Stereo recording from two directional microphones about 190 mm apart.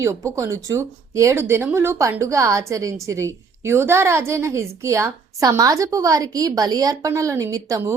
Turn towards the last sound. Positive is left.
turn(degrees=-15)  # may be behind; listen again after turning